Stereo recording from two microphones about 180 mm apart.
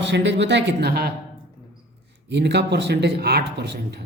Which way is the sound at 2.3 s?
70° right (ahead or behind).